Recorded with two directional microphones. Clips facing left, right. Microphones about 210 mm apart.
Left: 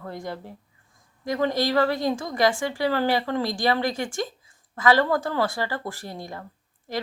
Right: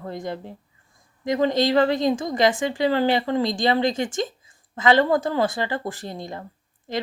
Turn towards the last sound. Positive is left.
turn(degrees=-20)  # may be behind; listen again after turning